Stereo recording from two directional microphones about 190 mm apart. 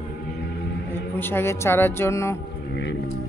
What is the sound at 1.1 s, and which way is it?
Speech, 10° left (ahead or behind).